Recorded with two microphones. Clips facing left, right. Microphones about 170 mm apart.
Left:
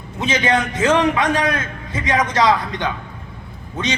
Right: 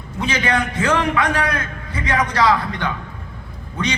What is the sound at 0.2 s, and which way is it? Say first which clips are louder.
A man's voice: left 2 dB; 20° left (ahead or behind).